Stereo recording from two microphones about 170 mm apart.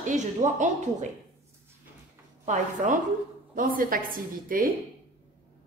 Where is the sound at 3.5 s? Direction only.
55° right (ahead or behind).